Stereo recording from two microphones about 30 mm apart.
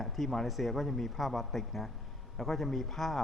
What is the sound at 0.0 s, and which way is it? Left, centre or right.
A man's voice, centre.